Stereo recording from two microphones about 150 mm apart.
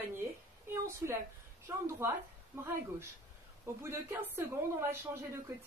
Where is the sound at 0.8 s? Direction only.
15° right (ahead or behind).